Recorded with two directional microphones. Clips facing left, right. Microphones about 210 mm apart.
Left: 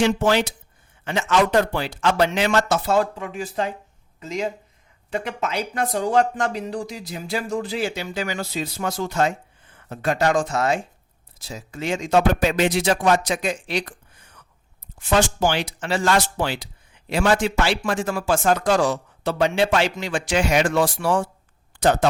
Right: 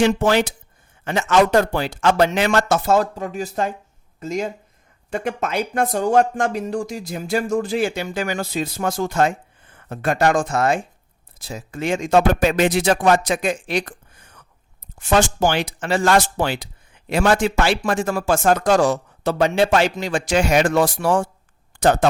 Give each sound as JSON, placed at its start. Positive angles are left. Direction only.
{"t": 0.0, "sound": "speech", "side_deg": -50}